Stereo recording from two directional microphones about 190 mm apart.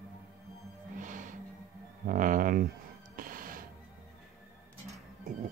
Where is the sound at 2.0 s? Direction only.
45° right (ahead or behind).